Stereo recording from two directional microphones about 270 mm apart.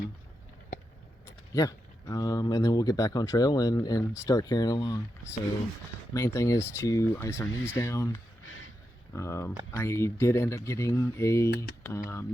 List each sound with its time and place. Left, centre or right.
1.5 s speech: centre
6.1 s speech: centre
7.5 s speech: left
7.8 s speech: centre